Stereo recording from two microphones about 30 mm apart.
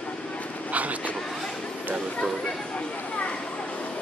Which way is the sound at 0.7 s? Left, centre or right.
Right.